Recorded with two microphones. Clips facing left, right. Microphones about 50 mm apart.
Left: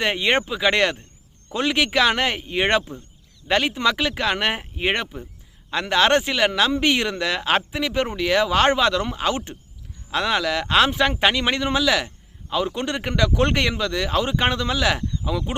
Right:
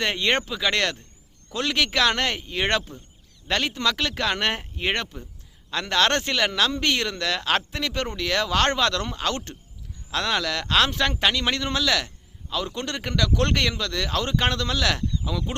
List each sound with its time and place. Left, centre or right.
0.0 s speech: centre